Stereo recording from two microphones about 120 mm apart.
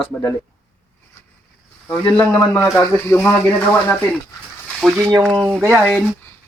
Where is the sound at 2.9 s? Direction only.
15° left (ahead or behind).